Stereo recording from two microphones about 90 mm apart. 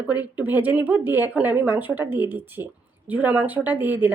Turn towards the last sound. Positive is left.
turn(degrees=-20)  # may be behind; listen again after turning